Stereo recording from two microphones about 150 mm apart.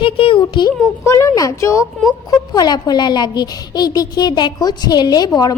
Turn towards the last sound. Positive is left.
turn(degrees=25)  # may be behind; listen again after turning